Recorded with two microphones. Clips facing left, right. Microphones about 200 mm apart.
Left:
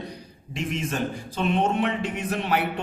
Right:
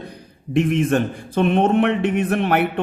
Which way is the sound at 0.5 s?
55° right (ahead or behind).